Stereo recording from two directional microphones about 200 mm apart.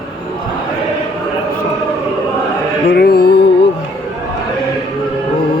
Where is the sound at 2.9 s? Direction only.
50° left (ahead or behind).